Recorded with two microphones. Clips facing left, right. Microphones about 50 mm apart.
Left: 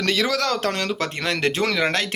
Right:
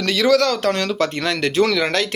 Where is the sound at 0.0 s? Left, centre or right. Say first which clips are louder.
Right 6 dB; left.